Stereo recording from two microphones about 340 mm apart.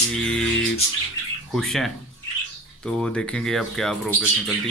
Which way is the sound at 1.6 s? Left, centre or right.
Centre.